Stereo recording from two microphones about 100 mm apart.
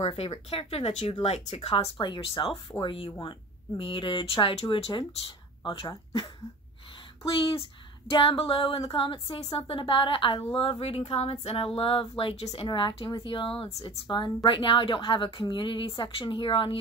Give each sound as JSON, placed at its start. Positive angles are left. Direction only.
{"t": 0.0, "sound": "speech", "side_deg": 75}
{"t": 2.0, "sound": "speech", "side_deg": 50}
{"t": 7.2, "sound": "speech", "side_deg": 65}
{"t": 12.6, "sound": "speech", "side_deg": 50}
{"t": 13.8, "sound": "speech", "side_deg": 50}